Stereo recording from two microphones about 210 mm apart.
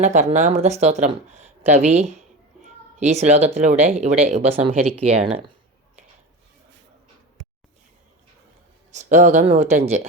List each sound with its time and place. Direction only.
0.0 s speech: 35° right (ahead or behind)
8.9 s speech: 35° right (ahead or behind)